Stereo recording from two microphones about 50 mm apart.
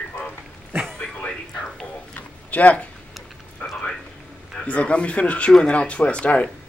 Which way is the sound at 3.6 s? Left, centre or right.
Left.